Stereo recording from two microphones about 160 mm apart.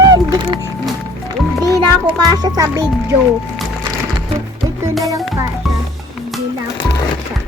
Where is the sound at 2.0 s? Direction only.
25° right (ahead or behind).